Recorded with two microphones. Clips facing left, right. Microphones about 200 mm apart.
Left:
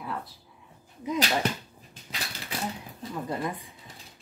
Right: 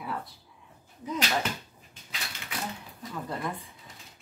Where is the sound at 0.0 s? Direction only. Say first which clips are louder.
Even; centre (ahead or behind).